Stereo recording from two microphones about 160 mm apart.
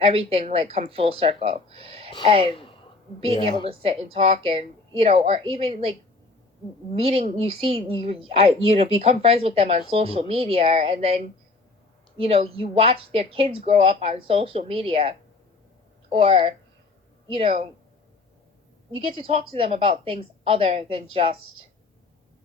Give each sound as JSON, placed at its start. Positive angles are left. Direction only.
{"t": 0.0, "sound": "speech", "side_deg": -35}
{"t": 3.3, "sound": "a woman's voice", "side_deg": 30}
{"t": 3.7, "sound": "speech", "side_deg": -35}
{"t": 7.0, "sound": "speech", "side_deg": -35}
{"t": 18.9, "sound": "speech", "side_deg": -35}